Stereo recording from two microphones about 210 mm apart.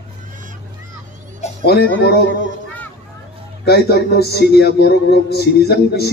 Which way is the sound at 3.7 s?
50° left (ahead or behind).